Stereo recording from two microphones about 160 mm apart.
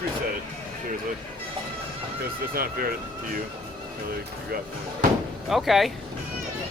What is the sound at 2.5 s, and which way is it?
Speech, 65° right (ahead or behind).